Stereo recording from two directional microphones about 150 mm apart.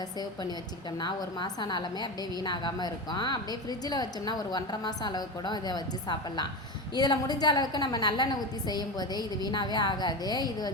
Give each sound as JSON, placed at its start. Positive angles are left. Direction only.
{"t": 1.0, "sound": "a woman's voice", "side_deg": 30}